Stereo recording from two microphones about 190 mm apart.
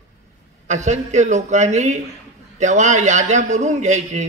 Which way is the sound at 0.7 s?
40° right (ahead or behind).